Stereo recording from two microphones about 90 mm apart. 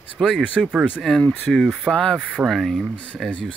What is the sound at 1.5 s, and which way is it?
Speech, 5° left (ahead or behind).